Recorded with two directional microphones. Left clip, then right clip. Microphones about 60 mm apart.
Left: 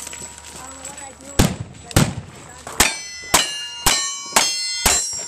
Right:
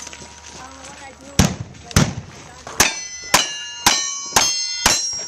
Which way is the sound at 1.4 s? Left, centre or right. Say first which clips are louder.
Even; right.